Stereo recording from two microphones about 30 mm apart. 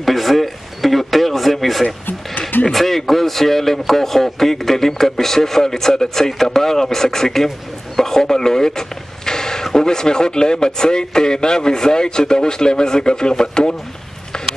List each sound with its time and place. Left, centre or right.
0.0 s radio: centre
2.7 s speech: centre; by 13.7 s left
14.3 s a sound: left